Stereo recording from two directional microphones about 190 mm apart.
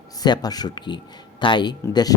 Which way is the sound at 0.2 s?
20° left (ahead or behind).